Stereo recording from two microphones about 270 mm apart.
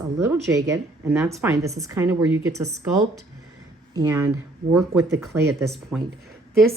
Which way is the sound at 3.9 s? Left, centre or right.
Centre.